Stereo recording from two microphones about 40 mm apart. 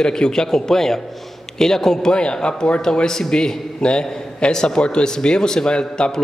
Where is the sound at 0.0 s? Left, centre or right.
Centre.